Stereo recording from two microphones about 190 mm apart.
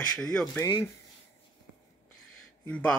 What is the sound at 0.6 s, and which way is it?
Speech, 20° left (ahead or behind).